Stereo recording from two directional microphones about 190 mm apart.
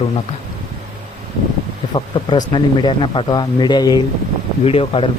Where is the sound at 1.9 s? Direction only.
25° left (ahead or behind).